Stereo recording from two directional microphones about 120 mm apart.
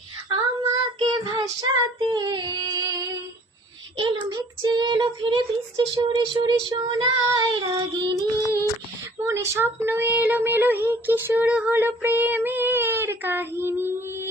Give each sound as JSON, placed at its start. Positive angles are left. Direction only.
{"t": 0.3, "sound": "child singing", "side_deg": -40}
{"t": 9.1, "sound": "speech", "side_deg": -25}